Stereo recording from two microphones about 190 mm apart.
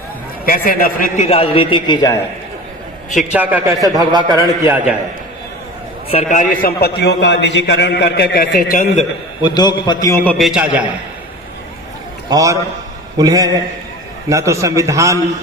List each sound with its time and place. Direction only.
0.4 s a man's voice: 50° left (ahead or behind); by 2.1 s 20° left (ahead or behind)
3.3 s a man's voice: 10° right (ahead or behind)
4.6 s a man's voice: 10° right (ahead or behind)
6.1 s a man's voice: 35° left (ahead or behind); by 8.5 s 65° left (ahead or behind)
8.5 s a man's voice: 45° left (ahead or behind)
9.4 s a man's voice: 20° left (ahead or behind)
10.2 s a man's voice: centre (ahead or behind)
12.3 s a man's voice: 15° right (ahead or behind)